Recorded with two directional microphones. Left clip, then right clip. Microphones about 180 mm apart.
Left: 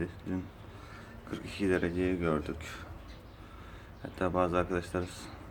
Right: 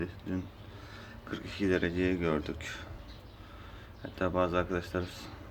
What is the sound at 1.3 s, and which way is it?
Speech, 5° left (ahead or behind).